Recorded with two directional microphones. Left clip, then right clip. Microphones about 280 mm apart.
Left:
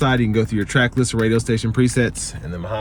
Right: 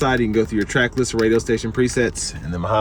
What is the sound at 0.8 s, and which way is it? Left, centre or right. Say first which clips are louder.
Speech: even; left.